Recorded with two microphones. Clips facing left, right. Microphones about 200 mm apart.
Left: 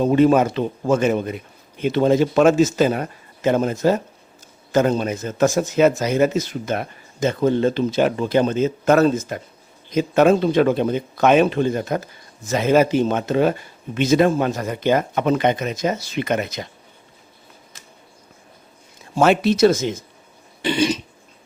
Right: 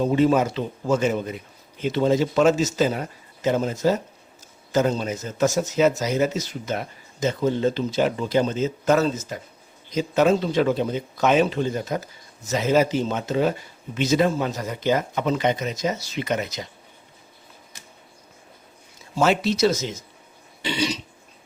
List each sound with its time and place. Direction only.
0.1 s speech: 55° left (ahead or behind)
19.1 s speech: 55° left (ahead or behind)
20.6 s burping: 50° left (ahead or behind)